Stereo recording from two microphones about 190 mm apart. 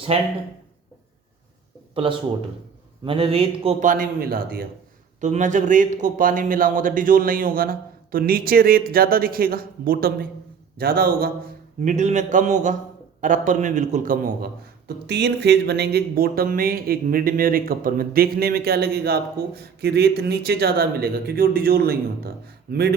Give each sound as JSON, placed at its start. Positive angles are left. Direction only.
{"t": 0.1, "sound": "a man's voice", "side_deg": -30}
{"t": 2.0, "sound": "a man's voice", "side_deg": -30}
{"t": 5.2, "sound": "a man's voice", "side_deg": -40}
{"t": 11.8, "sound": "a man's voice", "side_deg": -40}